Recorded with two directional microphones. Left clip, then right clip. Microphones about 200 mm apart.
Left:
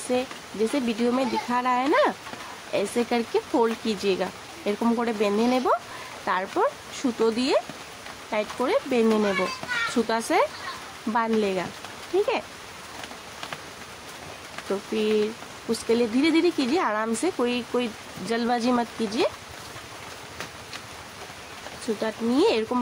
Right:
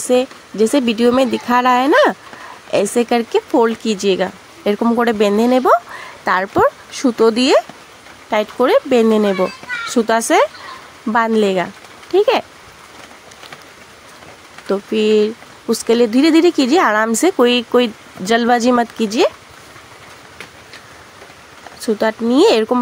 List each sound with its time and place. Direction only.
0.7 s speech: 40° right (ahead or behind)
14.7 s speech: 45° right (ahead or behind)
22.0 s speech: 45° right (ahead or behind)